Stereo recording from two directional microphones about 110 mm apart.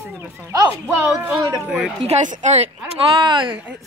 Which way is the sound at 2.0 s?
85° right.